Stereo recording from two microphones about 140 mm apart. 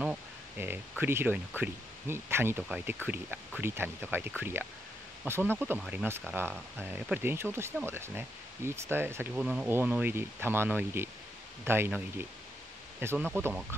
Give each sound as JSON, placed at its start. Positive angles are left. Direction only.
{"t": 0.0, "sound": "speech", "side_deg": -10}